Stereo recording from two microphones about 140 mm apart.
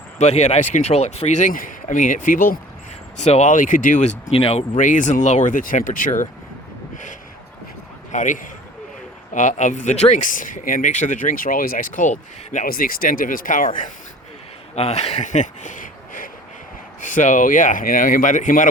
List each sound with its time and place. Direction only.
0.2 s speech: 55° left (ahead or behind); by 2.6 s 75° left (ahead or behind)
3.2 s speech: 55° left (ahead or behind)
4.8 s speech: 65° left (ahead or behind)
6.9 s a sound: 65° left (ahead or behind)
8.1 s speech: 65° left (ahead or behind)
14.8 s speech: 50° left (ahead or behind); by 18.7 s 65° left (ahead or behind)